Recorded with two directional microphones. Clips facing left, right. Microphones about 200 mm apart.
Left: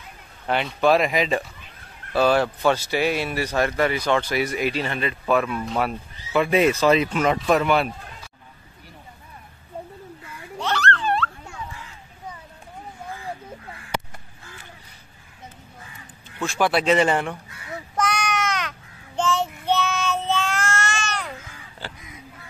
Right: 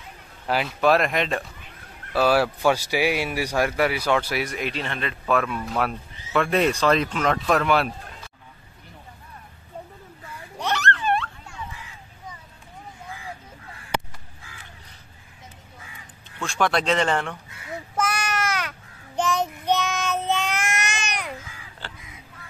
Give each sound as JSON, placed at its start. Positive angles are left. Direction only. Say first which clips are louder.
{"t": 0.5, "sound": "speech", "louder": "left 1 dB", "side_deg": -5}
{"t": 10.6, "sound": "a sound", "louder": "left 1 dB", "side_deg": -20}
{"t": 16.4, "sound": "speech", "louder": "left 2 dB", "side_deg": 5}
{"t": 17.9, "sound": "child singing", "louder": "left 2 dB", "side_deg": -5}